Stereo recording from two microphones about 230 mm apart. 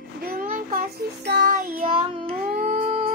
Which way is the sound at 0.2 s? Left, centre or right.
Right.